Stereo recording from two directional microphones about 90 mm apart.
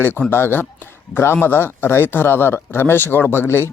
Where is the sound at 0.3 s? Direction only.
25° left (ahead or behind).